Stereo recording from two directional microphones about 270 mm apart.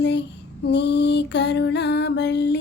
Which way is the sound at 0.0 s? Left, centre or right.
Left.